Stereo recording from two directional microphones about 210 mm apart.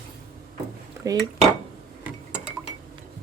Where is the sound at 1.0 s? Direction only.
15° right (ahead or behind).